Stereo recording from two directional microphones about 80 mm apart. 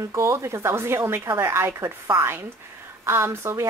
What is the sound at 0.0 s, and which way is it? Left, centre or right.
A woman's voice, right.